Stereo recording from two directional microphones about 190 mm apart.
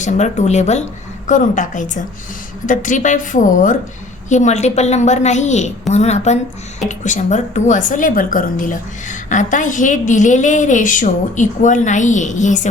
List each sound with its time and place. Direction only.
0.0 s a woman's voice: 40° left (ahead or behind)
4.3 s a woman's voice: 40° left (ahead or behind)